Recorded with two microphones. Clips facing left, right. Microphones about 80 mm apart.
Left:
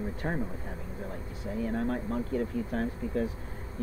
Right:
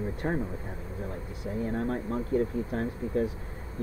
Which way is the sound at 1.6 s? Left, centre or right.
Right.